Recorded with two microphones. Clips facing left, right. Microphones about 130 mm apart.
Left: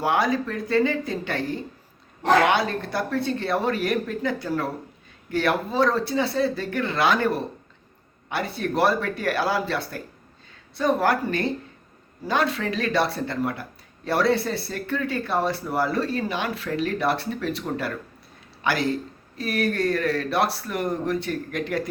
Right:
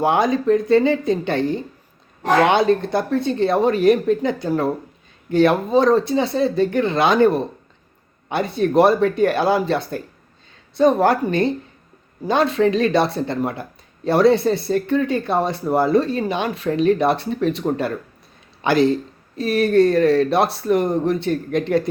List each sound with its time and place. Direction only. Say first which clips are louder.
0.0 s speech: right 5 dB; 20° right (ahead or behind)